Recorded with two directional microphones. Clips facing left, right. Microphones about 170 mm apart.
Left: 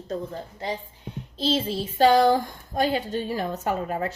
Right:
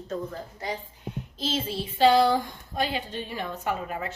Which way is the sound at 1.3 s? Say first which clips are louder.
Left 5 dB; 35° left (ahead or behind).